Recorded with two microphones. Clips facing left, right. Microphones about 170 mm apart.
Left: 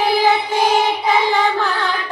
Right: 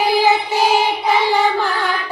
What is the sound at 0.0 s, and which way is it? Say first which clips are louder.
Music: right 1 dB; 10° right (ahead or behind).